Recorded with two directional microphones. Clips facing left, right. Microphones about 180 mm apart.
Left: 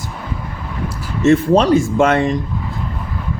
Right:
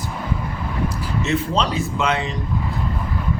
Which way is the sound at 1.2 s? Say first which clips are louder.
Left 11 dB; 50° left (ahead or behind).